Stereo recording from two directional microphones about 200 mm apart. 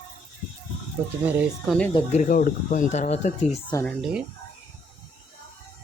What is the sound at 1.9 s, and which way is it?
Speech, 35° left (ahead or behind).